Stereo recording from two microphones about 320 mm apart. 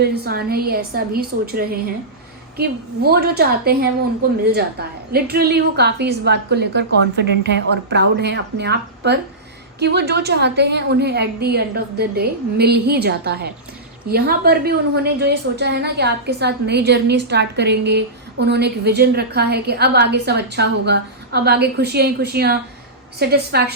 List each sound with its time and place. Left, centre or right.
0.0 s a woman's voice: right